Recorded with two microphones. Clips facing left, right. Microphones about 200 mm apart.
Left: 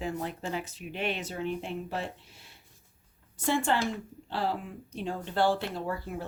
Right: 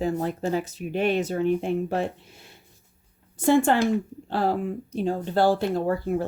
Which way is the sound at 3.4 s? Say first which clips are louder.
Right 9 dB; 45° right (ahead or behind).